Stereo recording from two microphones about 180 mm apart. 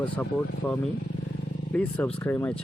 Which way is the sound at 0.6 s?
10° left (ahead or behind).